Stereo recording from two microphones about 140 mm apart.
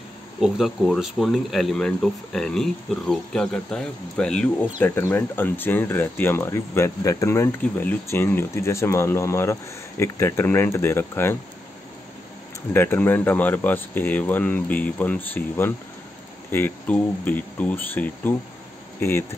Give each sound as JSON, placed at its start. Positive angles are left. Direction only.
{"t": 0.4, "sound": "speech", "side_deg": 0}
{"t": 12.7, "sound": "speech", "side_deg": 15}